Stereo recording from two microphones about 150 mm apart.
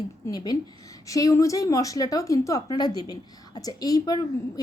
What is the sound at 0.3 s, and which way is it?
A woman's voice, 25° left (ahead or behind).